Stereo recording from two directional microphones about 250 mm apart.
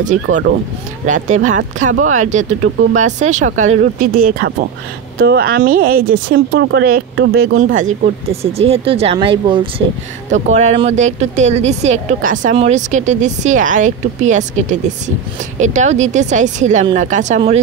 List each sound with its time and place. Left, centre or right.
0.0 s speech: right
7.7 s speech: right